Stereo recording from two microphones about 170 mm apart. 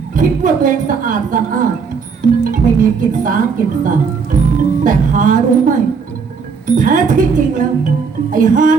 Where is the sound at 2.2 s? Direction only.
50° right (ahead or behind).